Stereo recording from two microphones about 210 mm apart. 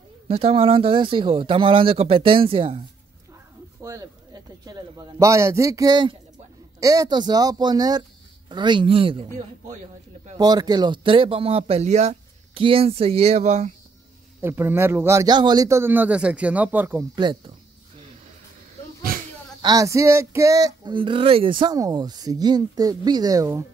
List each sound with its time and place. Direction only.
0.3 s speech: 30° right (ahead or behind)
3.8 s speech: 15° right (ahead or behind); by 9.8 s 30° right (ahead or behind)
10.3 s speech: 20° right (ahead or behind)
14.4 s speech: 10° right (ahead or behind)
19.6 s speech: 15° right (ahead or behind)